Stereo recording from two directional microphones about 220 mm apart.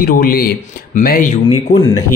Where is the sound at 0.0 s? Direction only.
40° left (ahead or behind).